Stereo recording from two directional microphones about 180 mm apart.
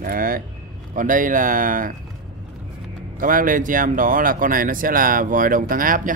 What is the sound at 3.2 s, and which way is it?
Speech, 50° right (ahead or behind).